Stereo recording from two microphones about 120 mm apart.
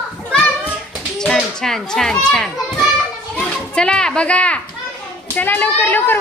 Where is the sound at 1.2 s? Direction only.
5° left (ahead or behind).